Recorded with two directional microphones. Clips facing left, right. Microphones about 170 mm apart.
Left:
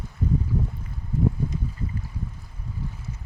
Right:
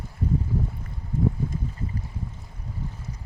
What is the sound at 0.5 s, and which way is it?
Boat, 30° right (ahead or behind).